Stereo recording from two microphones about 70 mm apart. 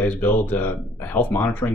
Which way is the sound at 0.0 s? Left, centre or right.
Left.